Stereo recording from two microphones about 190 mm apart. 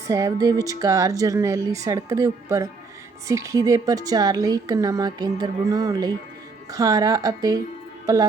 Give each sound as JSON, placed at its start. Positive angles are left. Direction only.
{"t": 0.1, "sound": "a woman's voice", "side_deg": -20}